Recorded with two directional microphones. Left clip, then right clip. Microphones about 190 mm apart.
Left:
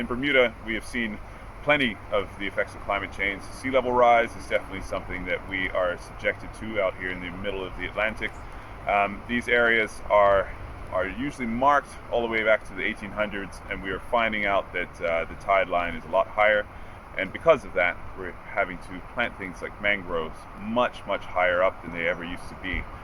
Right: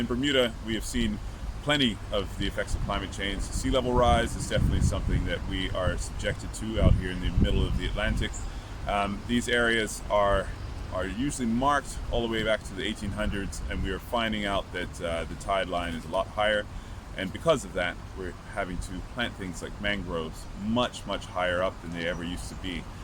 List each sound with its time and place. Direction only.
0.2 s speech: 35° right (ahead or behind)